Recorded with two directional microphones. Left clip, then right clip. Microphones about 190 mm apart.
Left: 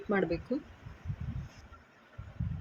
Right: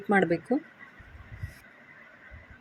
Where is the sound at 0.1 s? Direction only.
20° right (ahead or behind).